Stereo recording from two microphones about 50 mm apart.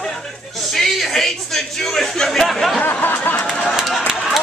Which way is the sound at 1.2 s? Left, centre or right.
Centre.